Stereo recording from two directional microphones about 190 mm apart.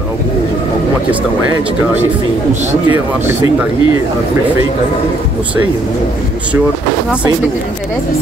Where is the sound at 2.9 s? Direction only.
10° right (ahead or behind).